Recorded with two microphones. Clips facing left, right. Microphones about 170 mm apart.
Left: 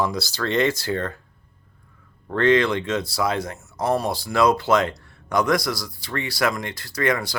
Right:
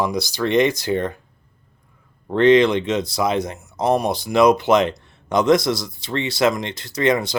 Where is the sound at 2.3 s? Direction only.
20° right (ahead or behind).